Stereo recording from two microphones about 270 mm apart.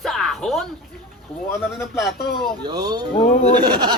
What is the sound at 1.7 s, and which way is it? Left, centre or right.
Speech, centre.